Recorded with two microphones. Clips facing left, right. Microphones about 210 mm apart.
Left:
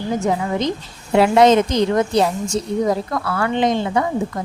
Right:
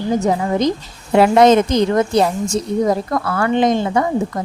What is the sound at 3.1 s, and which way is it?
Speech, 45° right (ahead or behind).